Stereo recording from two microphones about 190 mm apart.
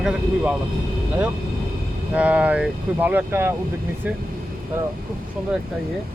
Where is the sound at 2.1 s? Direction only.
5° right (ahead or behind).